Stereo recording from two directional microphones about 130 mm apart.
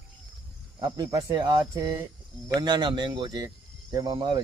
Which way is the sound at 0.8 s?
30° right (ahead or behind).